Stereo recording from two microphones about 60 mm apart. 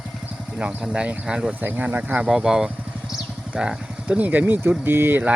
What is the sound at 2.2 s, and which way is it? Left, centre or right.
Speech, centre.